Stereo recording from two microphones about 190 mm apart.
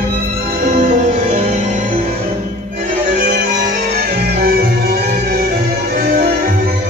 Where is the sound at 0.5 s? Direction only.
45° right (ahead or behind).